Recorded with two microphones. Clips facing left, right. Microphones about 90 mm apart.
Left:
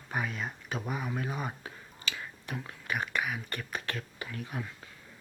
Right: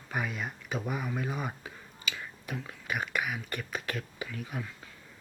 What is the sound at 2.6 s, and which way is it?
Speech, 10° right (ahead or behind).